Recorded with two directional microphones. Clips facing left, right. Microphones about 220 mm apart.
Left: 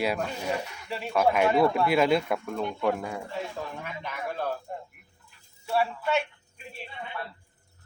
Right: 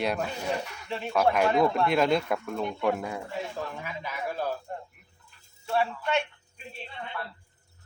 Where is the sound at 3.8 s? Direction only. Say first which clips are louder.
Even; 5° right (ahead or behind).